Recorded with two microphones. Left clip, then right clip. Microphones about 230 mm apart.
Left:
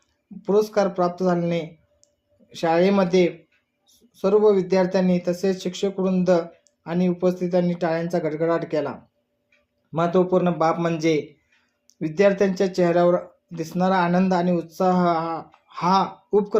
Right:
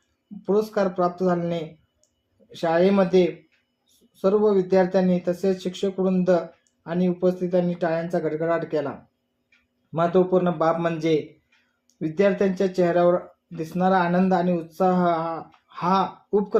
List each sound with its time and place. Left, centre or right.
0.4 s speech: centre